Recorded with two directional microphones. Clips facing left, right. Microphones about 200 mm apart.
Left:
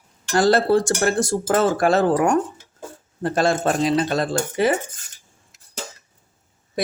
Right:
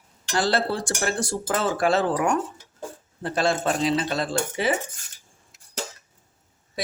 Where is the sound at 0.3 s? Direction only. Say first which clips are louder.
Left 7 dB; 45° left (ahead or behind).